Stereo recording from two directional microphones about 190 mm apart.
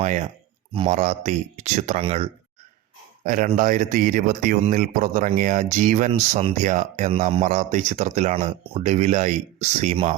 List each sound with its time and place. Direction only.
0.0 s speech: 40° right (ahead or behind)
3.2 s speech: 45° right (ahead or behind)